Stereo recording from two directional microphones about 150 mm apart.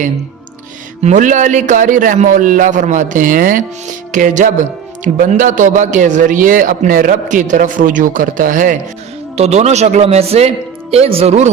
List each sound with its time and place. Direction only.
1.0 s a man's voice: 55° right (ahead or behind)
9.4 s speech: 50° right (ahead or behind)